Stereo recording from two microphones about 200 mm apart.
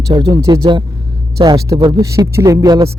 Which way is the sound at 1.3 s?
20° right (ahead or behind).